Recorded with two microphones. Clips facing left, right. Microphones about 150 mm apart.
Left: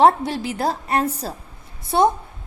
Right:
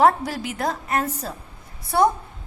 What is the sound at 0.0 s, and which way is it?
A woman's voice, 25° left (ahead or behind).